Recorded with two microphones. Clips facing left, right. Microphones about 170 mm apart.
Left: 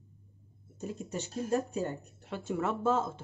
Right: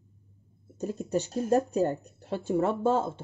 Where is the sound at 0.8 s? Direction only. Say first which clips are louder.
Right 8 dB; 40° right (ahead or behind).